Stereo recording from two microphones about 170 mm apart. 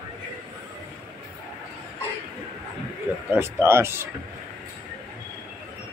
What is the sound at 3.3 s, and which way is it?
Speech, 15° right (ahead or behind).